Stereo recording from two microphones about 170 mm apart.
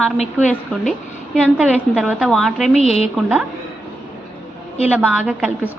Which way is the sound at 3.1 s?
5° right (ahead or behind).